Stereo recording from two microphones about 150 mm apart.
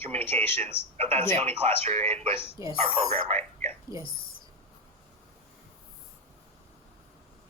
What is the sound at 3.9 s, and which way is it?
Speech, 20° right (ahead or behind).